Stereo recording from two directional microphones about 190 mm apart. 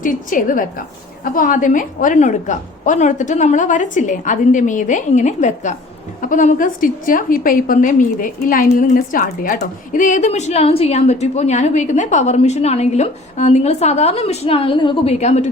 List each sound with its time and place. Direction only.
0.0 s a woman's voice: 45° left (ahead or behind)